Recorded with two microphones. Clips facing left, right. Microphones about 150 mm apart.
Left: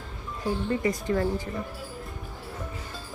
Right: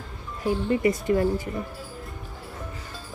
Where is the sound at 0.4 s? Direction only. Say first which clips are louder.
Right 4 dB; 20° right (ahead or behind).